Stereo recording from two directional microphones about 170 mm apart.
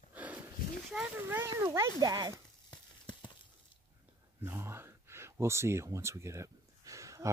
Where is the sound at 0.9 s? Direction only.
10° right (ahead or behind).